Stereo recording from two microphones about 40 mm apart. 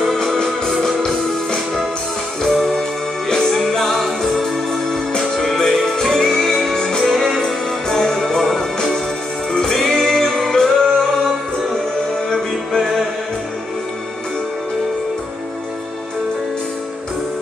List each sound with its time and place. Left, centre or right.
0.0 s music: centre
2.4 s music: centre
5.4 s music: centre
7.1 s music: centre
7.9 s music: centre
9.5 s music: centre
12.7 s music: centre